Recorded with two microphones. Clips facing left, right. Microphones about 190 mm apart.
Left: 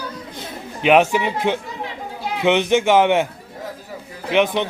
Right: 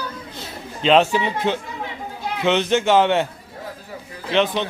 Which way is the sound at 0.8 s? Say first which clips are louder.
Left 1 dB; 15° left (ahead or behind).